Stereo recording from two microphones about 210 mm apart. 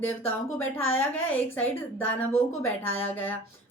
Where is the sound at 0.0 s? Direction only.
10° left (ahead or behind).